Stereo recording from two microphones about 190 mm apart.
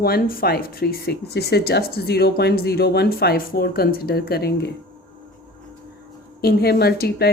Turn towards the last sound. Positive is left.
turn(degrees=55)  # may be behind; listen again after turning